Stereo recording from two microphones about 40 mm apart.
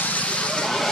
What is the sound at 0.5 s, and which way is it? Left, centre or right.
Vehicle, centre.